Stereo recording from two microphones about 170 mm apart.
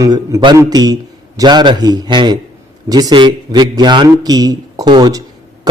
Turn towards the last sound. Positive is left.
turn(degrees=-25)  # may be behind; listen again after turning